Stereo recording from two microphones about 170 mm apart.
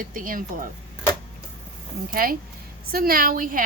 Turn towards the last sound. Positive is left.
turn(degrees=-55)  # may be behind; listen again after turning